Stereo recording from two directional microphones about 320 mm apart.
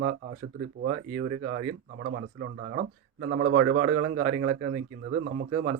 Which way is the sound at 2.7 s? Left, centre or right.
Right.